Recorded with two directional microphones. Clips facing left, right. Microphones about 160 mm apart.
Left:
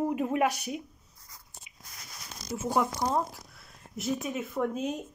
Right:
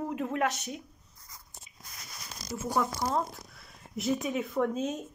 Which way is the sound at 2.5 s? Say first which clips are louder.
Left 2 dB; 20° left (ahead or behind).